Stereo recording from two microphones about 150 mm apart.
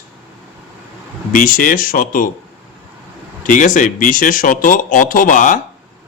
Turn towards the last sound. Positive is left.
turn(degrees=60)  # may be behind; listen again after turning